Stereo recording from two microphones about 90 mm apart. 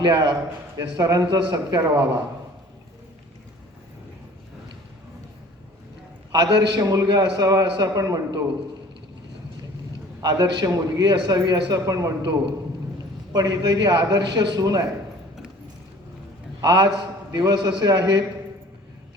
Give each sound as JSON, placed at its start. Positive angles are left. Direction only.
{"t": 0.0, "sound": "a man's voice", "side_deg": -55}
{"t": 6.3, "sound": "a man's voice", "side_deg": -55}
{"t": 10.2, "sound": "a man's voice", "side_deg": -50}
{"t": 13.3, "sound": "a man's voice", "side_deg": -50}
{"t": 16.6, "sound": "a man's voice", "side_deg": -50}